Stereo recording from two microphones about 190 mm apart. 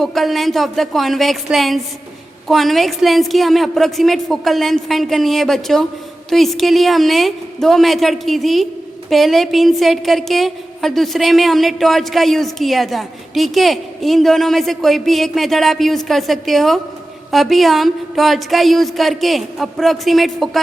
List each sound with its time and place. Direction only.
0.0 s a woman's voice: centre (ahead or behind)